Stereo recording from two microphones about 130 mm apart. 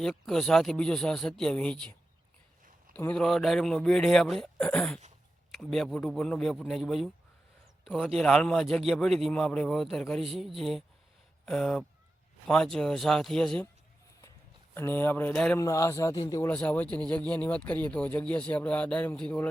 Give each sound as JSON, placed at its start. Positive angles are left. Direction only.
{"t": 0.0, "sound": "a man's voice", "side_deg": 5}
{"t": 8.2, "sound": "a man's voice", "side_deg": 5}
{"t": 14.8, "sound": "speech", "side_deg": 15}
{"t": 15.5, "sound": "speech", "side_deg": 25}
{"t": 16.5, "sound": "speech", "side_deg": 10}